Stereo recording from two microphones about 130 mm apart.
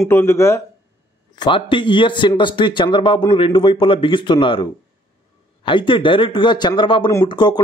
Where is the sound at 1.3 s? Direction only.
35° left (ahead or behind).